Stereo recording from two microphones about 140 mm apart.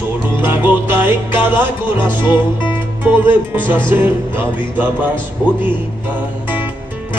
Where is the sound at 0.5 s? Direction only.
15° right (ahead or behind).